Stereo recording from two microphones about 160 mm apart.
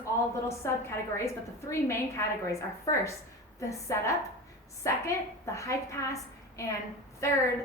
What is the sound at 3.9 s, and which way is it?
A woman's voice, 20° left (ahead or behind).